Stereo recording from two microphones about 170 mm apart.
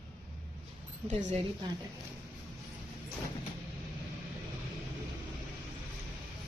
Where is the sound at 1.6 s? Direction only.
25° right (ahead or behind).